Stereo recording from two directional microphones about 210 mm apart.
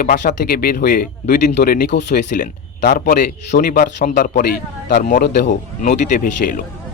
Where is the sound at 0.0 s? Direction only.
40° left (ahead or behind).